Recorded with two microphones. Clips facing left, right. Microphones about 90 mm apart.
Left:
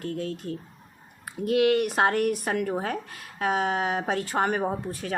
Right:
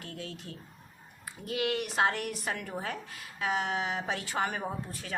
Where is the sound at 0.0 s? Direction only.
45° left (ahead or behind).